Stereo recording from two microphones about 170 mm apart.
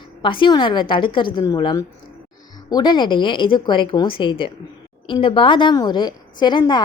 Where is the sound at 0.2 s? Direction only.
30° left (ahead or behind).